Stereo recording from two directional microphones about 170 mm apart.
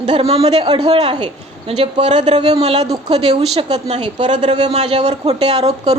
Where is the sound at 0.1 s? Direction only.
35° right (ahead or behind).